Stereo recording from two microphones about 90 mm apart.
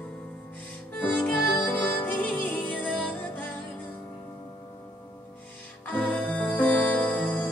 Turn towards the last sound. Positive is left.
turn(degrees=15)  # may be behind; listen again after turning